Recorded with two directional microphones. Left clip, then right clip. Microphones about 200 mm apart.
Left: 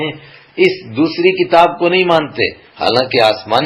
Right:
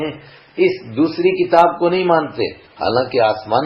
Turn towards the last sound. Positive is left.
turn(degrees=20)  # may be behind; listen again after turning